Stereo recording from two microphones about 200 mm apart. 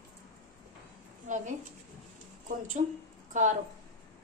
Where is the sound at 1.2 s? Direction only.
40° right (ahead or behind).